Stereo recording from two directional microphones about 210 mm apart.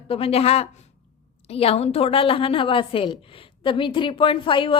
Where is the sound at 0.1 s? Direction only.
30° left (ahead or behind).